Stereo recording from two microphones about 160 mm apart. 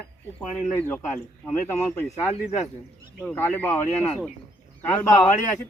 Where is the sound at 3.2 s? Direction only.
10° left (ahead or behind).